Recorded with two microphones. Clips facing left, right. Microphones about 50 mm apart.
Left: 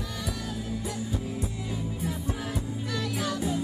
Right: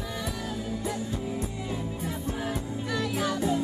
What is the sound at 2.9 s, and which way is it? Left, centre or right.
Music, centre.